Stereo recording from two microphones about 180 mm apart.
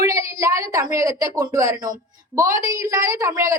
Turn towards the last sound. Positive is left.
turn(degrees=-15)  # may be behind; listen again after turning